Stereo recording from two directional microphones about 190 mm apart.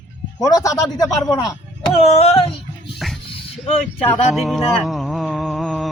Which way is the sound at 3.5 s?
30° left (ahead or behind).